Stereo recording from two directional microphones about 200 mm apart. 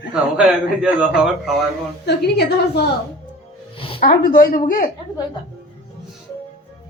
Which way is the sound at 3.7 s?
25° left (ahead or behind).